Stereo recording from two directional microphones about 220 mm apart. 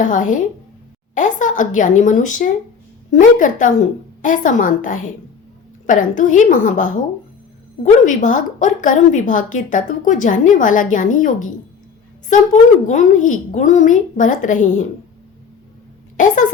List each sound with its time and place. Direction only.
0.0 s a woman's voice: 35° left (ahead or behind)
8.0 s a woman's voice: 35° left (ahead or behind)
12.9 s a woman's voice: 35° left (ahead or behind)
16.1 s a woman's voice: 35° left (ahead or behind)